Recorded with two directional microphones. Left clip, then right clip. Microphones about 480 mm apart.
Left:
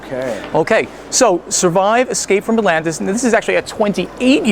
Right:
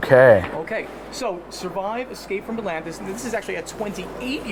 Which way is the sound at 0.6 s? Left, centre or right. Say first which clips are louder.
Left 13 dB; left.